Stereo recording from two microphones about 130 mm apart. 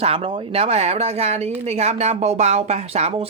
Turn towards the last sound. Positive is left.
turn(degrees=-55)  # may be behind; listen again after turning